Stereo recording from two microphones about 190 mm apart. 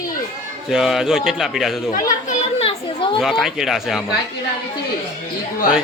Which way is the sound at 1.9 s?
40° left (ahead or behind).